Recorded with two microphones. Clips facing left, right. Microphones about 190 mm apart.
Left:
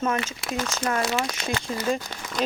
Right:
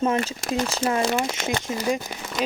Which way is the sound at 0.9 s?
25° right (ahead or behind).